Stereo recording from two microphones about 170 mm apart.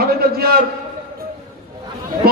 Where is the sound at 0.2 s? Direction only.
65° right (ahead or behind).